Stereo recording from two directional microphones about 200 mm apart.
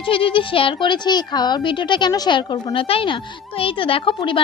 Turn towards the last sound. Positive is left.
turn(degrees=25)  # may be behind; listen again after turning